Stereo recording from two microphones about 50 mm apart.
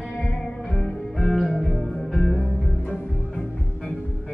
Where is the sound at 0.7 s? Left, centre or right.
Centre.